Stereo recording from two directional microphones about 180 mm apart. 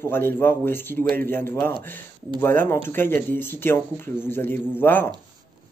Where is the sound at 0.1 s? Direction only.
10° left (ahead or behind).